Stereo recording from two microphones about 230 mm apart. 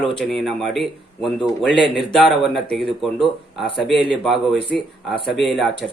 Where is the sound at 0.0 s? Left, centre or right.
Centre.